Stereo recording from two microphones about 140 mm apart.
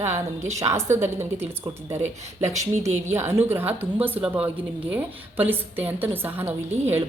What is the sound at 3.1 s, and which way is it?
A woman's voice, 15° right (ahead or behind).